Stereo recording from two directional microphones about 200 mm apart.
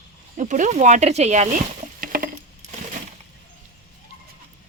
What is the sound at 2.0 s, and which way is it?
Patter, 45° right (ahead or behind).